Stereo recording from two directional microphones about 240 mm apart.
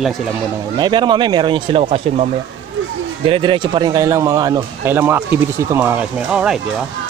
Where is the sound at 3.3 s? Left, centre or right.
Right; by 6.6 s centre.